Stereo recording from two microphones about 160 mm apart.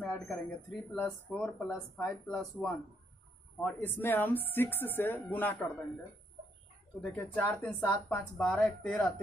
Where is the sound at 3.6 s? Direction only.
10° left (ahead or behind).